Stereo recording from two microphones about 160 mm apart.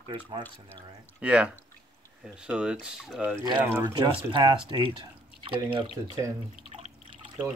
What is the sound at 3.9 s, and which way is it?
Speech, 25° right (ahead or behind).